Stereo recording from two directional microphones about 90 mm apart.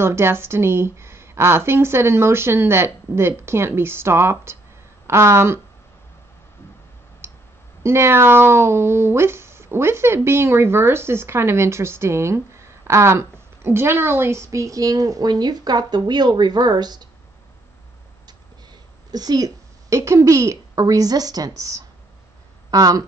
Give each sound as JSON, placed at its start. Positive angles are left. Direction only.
{"t": 0.0, "sound": "speech", "side_deg": -25}
{"t": 7.8, "sound": "speech", "side_deg": -30}
{"t": 19.1, "sound": "a woman's voice", "side_deg": -45}